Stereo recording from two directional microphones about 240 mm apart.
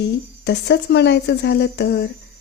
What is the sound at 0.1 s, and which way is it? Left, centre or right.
Speech, left.